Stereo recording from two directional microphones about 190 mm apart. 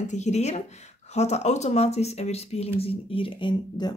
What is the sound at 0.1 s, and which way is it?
Speech, 35° left (ahead or behind).